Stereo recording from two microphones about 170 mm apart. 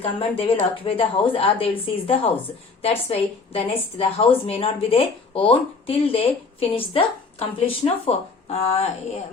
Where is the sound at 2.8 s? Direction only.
35° left (ahead or behind).